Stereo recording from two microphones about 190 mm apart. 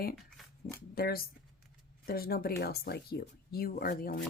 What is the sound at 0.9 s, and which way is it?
Speech, 55° left (ahead or behind).